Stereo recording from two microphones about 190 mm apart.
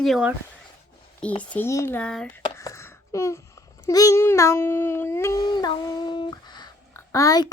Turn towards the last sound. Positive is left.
turn(degrees=20)  # may be behind; listen again after turning